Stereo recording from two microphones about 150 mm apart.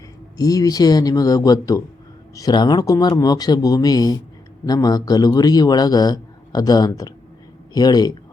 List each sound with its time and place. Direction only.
0.3 s a man's voice: 25° left (ahead or behind)